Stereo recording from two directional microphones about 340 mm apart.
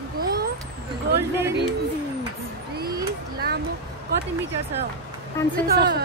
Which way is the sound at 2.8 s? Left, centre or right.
Right.